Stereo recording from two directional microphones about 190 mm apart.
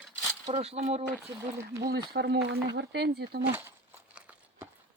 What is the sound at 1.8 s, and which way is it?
Speech, 55° right (ahead or behind).